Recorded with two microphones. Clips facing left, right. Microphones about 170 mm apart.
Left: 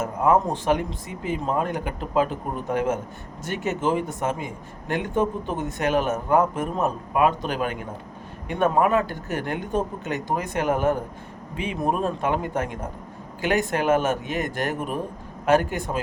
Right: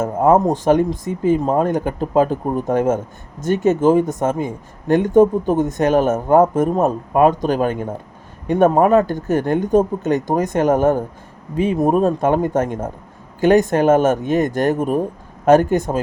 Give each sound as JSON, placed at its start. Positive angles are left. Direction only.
{"t": 0.0, "sound": "speech", "side_deg": -45}